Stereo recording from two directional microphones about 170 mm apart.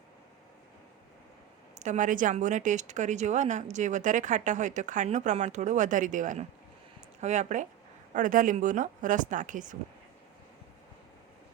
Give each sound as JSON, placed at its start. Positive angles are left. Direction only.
{"t": 1.8, "sound": "speech", "side_deg": -45}